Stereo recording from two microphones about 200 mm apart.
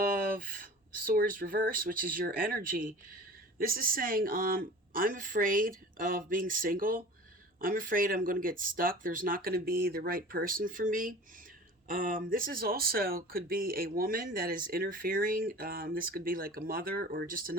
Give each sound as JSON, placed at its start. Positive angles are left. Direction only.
{"t": 0.0, "sound": "speech", "side_deg": -45}